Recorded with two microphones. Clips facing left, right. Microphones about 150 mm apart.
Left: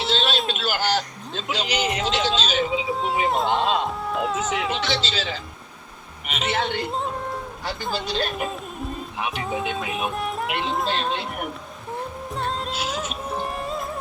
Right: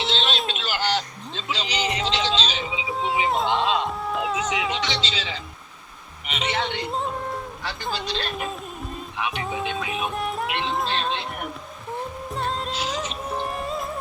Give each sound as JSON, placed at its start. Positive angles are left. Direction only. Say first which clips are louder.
{"t": 0.2, "sound": "a sound", "louder": "left 2 dB", "side_deg": 5}
{"t": 0.7, "sound": "music", "louder": "left 1 dB", "side_deg": 45}
{"t": 1.5, "sound": "speech", "louder": "left 3 dB", "side_deg": 50}
{"t": 1.8, "sound": "music", "louder": "even", "side_deg": 5}
{"t": 6.2, "sound": "a man's voice", "louder": "left 1 dB", "side_deg": 5}
{"t": 6.8, "sound": "music", "louder": "even", "side_deg": 0}
{"t": 9.2, "sound": "music", "louder": "left 1 dB", "side_deg": 0}
{"t": 12.3, "sound": "music", "louder": "even", "side_deg": 0}